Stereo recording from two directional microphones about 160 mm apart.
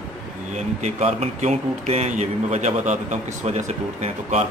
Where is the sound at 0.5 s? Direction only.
45° right (ahead or behind).